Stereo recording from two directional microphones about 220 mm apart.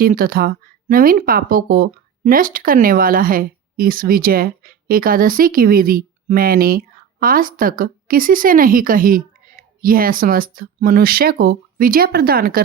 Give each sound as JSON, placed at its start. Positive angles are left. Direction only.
{"t": 0.0, "sound": "speech", "side_deg": -40}